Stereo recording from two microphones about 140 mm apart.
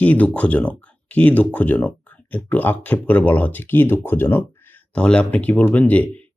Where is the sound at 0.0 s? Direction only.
10° left (ahead or behind).